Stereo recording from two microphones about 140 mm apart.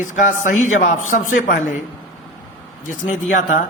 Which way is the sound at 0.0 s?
65° left (ahead or behind).